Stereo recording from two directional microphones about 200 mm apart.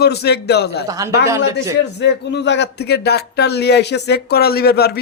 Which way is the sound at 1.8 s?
60° left (ahead or behind).